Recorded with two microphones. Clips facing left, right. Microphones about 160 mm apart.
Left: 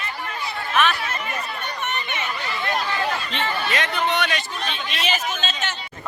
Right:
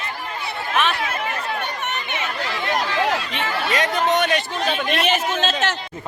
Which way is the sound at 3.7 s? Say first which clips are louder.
Right 6 dB; 40° right (ahead or behind).